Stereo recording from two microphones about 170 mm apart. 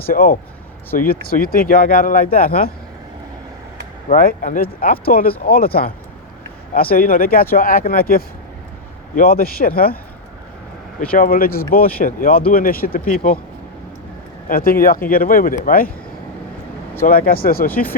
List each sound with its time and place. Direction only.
0.1 s speech: 60° left (ahead or behind)
4.1 s speech: 55° left (ahead or behind)
11.1 s speech: 55° left (ahead or behind)
14.4 s speech: 60° left (ahead or behind)
17.1 s speech: 60° left (ahead or behind)